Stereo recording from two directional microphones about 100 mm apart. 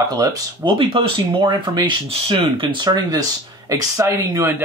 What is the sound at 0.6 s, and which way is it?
Speech, 65° right (ahead or behind).